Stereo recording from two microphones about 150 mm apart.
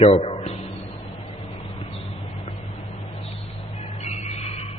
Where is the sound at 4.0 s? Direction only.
45° left (ahead or behind).